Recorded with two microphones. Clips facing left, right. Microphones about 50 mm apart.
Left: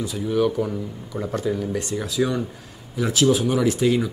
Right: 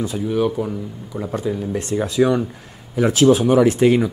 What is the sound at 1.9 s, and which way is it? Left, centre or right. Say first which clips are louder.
Speech: right 9 dB; right.